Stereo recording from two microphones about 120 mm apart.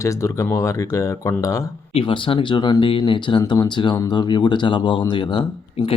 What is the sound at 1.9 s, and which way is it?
Speech, 50° left (ahead or behind).